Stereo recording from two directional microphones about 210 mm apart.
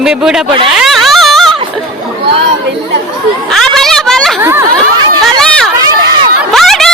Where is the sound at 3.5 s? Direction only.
Centre (ahead or behind).